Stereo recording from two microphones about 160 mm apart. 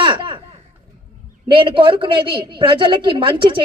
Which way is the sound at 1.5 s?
30° right (ahead or behind).